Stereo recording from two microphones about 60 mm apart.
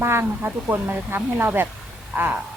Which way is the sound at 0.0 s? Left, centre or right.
Right.